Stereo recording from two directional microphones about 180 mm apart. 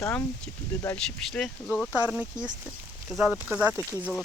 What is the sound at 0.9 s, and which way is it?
Speech, 5° left (ahead or behind).